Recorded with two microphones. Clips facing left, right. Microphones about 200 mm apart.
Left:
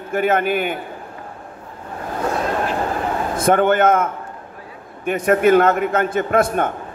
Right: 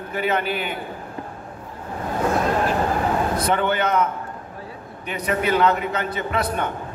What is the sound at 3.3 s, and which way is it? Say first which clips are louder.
A man's voice: left 6 dB; 50° left (ahead or behind).